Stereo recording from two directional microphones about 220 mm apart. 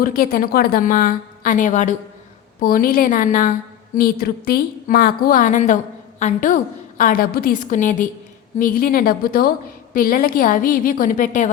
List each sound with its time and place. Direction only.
0.0 s a woman's voice: 40° left (ahead or behind)